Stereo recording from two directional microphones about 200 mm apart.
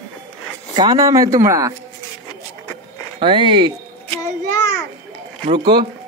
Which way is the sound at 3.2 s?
25° right (ahead or behind).